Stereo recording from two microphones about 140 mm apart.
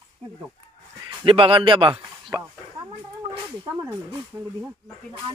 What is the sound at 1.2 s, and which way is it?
Speech, 40° right (ahead or behind).